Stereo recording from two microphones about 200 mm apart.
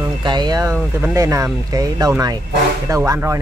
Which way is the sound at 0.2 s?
20° right (ahead or behind).